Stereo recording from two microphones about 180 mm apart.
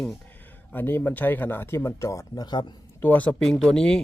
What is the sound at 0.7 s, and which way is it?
Speech, 10° left (ahead or behind).